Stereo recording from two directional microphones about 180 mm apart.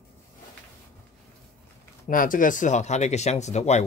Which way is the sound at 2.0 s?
50° left (ahead or behind).